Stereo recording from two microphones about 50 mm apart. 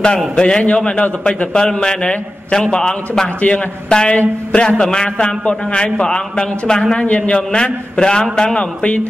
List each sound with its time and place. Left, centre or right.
0.4 s a man's voice: centre
1.5 s a man's voice: centre
3.3 s a man's voice: left
7.1 s a man's voice: left